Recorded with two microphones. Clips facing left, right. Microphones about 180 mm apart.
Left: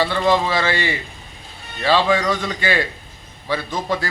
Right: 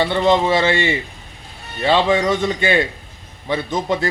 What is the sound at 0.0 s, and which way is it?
A man's voice, 20° right (ahead or behind).